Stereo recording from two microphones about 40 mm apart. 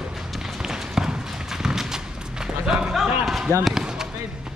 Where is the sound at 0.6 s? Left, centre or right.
Centre.